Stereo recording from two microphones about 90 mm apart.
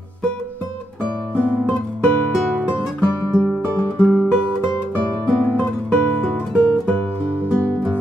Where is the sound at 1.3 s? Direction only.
15° left (ahead or behind).